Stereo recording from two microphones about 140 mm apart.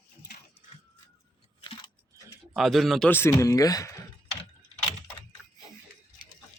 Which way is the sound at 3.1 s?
20° left (ahead or behind).